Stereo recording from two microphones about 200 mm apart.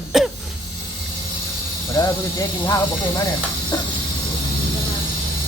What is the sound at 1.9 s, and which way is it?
Speech, 15° left (ahead or behind).